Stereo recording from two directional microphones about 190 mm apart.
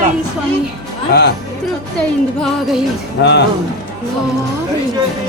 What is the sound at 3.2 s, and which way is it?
Speech, 65° left (ahead or behind).